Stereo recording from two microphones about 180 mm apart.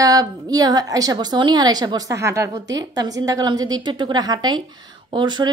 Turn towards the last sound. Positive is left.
turn(degrees=-25)  # may be behind; listen again after turning